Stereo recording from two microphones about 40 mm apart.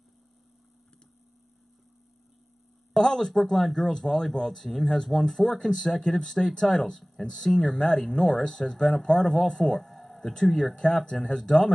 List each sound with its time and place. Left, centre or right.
2.9 s speech: centre
9.8 s a sound: centre
10.4 s speech: centre